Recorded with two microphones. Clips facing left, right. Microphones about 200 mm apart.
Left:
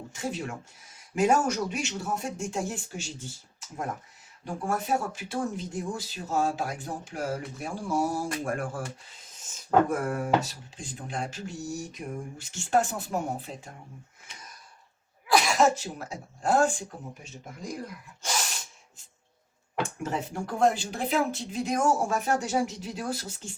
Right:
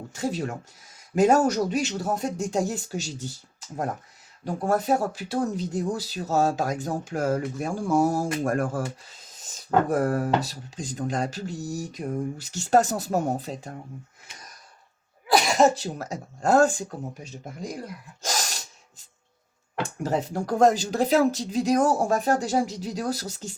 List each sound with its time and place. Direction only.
0.1 s speech: 35° right (ahead or behind)
4.4 s speech: 40° right (ahead or behind)
9.9 s speech: 35° right (ahead or behind)
15.5 s speech: 35° right (ahead or behind)
18.3 s sneeze: 40° right (ahead or behind)
20.0 s speech: 35° right (ahead or behind)